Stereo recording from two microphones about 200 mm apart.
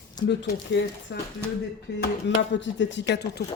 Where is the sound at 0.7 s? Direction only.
60° left (ahead or behind).